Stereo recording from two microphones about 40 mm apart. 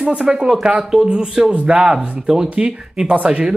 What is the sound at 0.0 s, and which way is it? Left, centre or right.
Speech, right.